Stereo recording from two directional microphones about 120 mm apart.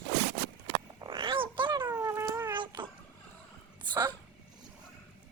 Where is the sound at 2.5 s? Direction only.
40° right (ahead or behind).